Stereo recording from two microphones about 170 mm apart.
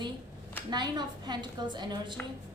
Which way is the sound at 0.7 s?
25° right (ahead or behind).